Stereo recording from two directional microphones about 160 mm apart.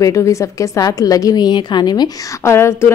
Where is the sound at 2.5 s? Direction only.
15° left (ahead or behind).